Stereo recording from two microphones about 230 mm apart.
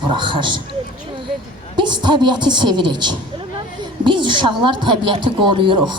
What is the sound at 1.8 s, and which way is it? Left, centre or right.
A man's voice, centre.